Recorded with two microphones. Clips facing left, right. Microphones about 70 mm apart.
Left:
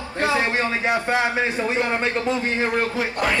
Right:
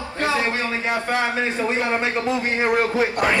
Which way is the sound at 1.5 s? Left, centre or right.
Centre.